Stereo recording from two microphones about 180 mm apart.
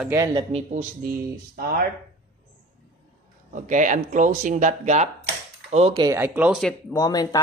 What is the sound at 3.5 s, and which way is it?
Speech, 45° right (ahead or behind).